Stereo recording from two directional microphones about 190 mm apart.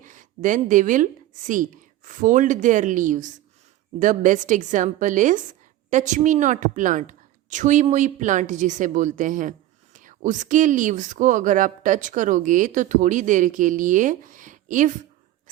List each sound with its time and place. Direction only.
0.0 s a woman's voice: 45° right (ahead or behind)